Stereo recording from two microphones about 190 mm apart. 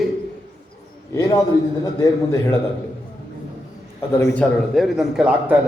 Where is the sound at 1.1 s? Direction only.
15° left (ahead or behind).